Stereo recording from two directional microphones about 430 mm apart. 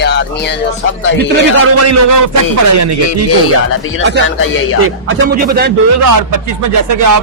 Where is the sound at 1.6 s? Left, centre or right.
Right.